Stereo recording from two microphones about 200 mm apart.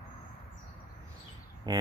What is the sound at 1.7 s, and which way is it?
Speech, 20° right (ahead or behind).